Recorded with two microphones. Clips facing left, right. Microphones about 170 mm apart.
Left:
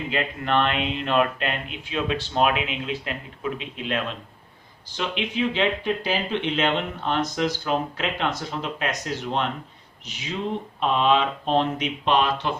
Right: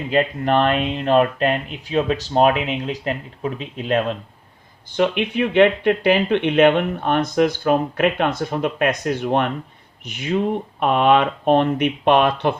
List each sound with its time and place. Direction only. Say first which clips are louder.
0.1 s speech: right 7 dB; 40° right (ahead or behind)
4.9 s speech: right 9 dB; 55° right (ahead or behind)